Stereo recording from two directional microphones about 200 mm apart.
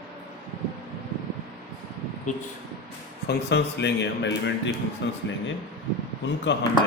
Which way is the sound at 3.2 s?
55° left (ahead or behind).